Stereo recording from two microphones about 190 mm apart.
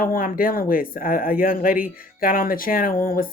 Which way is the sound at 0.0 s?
50° left (ahead or behind).